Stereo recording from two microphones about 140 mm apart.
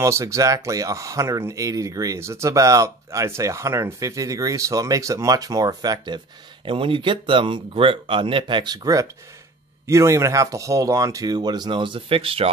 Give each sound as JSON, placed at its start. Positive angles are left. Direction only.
{"t": 0.0, "sound": "speech", "side_deg": -20}